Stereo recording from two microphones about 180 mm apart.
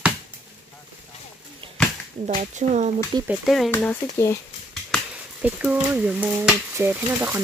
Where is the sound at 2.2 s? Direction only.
40° right (ahead or behind).